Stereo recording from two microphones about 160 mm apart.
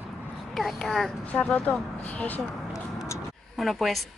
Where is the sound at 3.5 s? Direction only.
Centre (ahead or behind).